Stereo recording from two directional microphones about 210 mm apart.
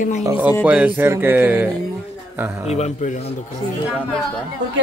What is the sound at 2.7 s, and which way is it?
Speech, 30° left (ahead or behind).